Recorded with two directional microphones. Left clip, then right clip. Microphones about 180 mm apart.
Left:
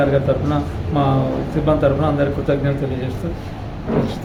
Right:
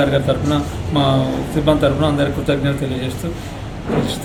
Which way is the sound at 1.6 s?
5° left (ahead or behind).